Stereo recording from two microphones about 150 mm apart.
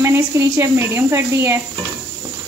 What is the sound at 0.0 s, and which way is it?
A woman's voice, 20° right (ahead or behind).